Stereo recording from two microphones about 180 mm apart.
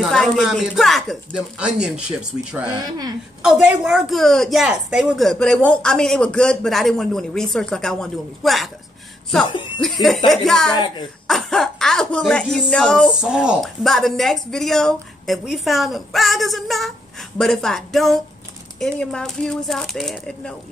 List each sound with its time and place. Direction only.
0.0 s speech: centre (ahead or behind)
9.8 s speech: 5° left (ahead or behind)
10.7 s a woman's voice: 25° left (ahead or behind)
11.2 s speech: centre (ahead or behind)